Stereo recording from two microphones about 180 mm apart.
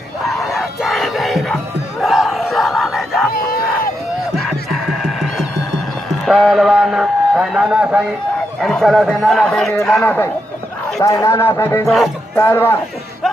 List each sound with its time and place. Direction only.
0.3 s crowd: centre (ahead or behind)
4.4 s music: centre (ahead or behind)
6.2 s a man's voice: centre (ahead or behind); by 11.9 s 15° left (ahead or behind)
11.9 s a man's voice: centre (ahead or behind)
12.4 s speech: 10° left (ahead or behind)